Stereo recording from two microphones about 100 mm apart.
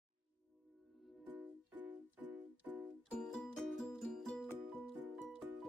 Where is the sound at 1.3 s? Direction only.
15° right (ahead or behind).